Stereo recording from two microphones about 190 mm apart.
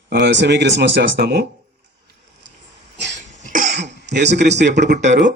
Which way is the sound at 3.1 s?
40° right (ahead or behind).